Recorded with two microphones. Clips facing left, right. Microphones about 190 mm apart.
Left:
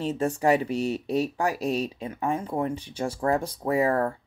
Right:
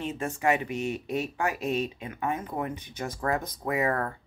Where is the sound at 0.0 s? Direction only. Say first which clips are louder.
Left 4 dB; 35° left (ahead or behind).